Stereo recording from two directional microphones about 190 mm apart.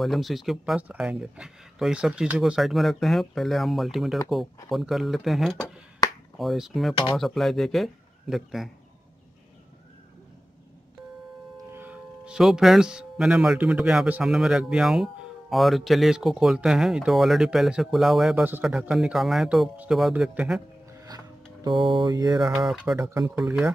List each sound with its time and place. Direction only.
0.0 s speech: centre (ahead or behind)
11.5 s speech: 10° right (ahead or behind)
21.6 s mantra: 25° right (ahead or behind)
22.9 s speech: 15° right (ahead or behind)